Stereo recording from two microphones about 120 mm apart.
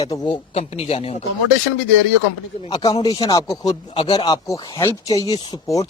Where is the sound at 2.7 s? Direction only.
35° left (ahead or behind).